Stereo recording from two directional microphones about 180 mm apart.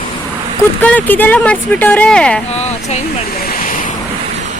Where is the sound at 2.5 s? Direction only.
35° left (ahead or behind).